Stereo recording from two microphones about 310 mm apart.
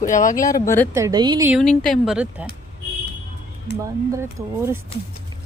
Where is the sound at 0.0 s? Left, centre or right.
Left.